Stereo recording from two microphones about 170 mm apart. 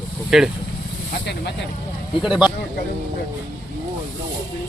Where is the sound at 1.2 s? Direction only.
80° left.